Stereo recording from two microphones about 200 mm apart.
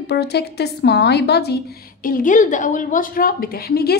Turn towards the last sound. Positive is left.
turn(degrees=50)  # may be behind; listen again after turning